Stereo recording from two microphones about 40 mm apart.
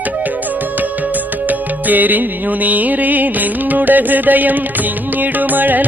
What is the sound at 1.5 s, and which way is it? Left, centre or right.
Music, right.